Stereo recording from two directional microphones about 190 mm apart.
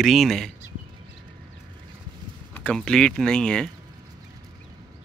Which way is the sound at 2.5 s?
5° left (ahead or behind).